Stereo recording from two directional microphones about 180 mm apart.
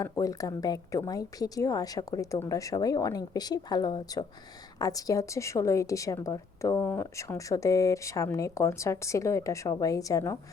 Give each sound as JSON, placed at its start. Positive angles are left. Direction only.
{"t": 0.0, "sound": "a woman's voice", "side_deg": 20}